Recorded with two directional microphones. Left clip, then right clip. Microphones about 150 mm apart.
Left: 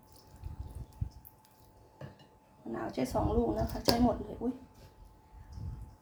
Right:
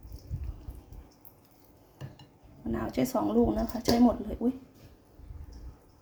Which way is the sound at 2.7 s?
50° right (ahead or behind).